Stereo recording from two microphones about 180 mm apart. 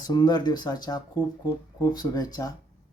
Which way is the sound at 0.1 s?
20° left (ahead or behind).